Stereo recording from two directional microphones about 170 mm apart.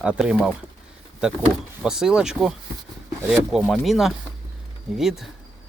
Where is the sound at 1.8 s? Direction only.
5° right (ahead or behind).